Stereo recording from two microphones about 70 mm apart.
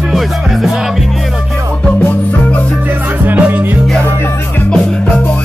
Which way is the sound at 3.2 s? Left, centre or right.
Right.